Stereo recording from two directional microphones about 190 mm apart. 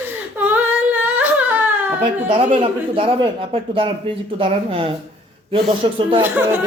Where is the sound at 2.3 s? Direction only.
30° right (ahead or behind).